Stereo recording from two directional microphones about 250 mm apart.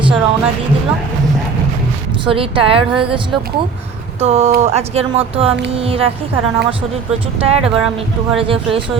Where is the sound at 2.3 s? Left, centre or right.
Right.